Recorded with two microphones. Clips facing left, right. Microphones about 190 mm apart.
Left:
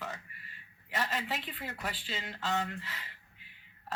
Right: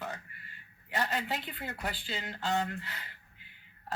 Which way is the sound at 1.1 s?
40° right (ahead or behind).